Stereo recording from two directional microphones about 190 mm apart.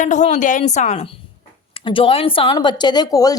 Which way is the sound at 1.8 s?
25° left (ahead or behind).